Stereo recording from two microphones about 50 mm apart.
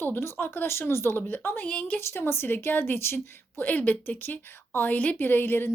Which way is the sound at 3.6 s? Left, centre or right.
Left.